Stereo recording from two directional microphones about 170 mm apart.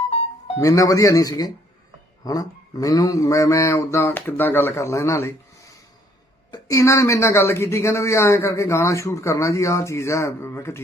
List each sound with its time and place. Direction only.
0.1 s music: 35° left (ahead or behind)
0.6 s speech: 20° left (ahead or behind)